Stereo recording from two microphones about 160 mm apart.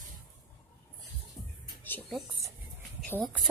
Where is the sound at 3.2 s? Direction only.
Centre (ahead or behind).